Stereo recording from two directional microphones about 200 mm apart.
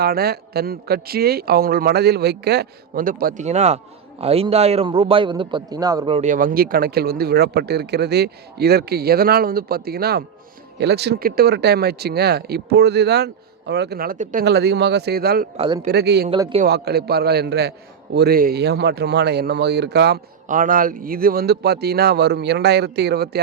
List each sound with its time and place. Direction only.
0.0 s a man's voice: 50° right (ahead or behind); by 6.1 s 20° right (ahead or behind)
6.1 s speech: 40° right (ahead or behind)
15.5 s a man's voice: 30° right (ahead or behind)
15.9 s a man's voice: 55° right (ahead or behind)
16.3 s a man's voice: 25° right (ahead or behind)
16.6 s a man's voice: 55° right (ahead or behind)
20.5 s speech: 45° right (ahead or behind)